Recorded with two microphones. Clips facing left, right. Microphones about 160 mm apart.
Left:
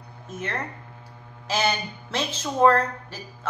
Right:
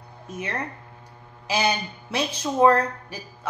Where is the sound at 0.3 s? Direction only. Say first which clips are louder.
Right 1 dB; 10° right (ahead or behind).